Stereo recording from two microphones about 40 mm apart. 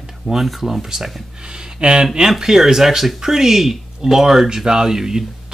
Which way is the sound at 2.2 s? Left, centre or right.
Centre.